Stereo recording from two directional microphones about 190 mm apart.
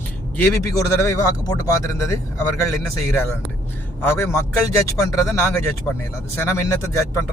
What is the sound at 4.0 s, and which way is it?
Speech, 10° left (ahead or behind).